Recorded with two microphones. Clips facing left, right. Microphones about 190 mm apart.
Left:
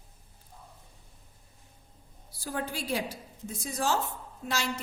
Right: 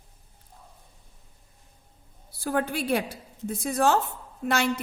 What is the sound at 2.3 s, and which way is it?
A woman's voice, 60° right (ahead or behind).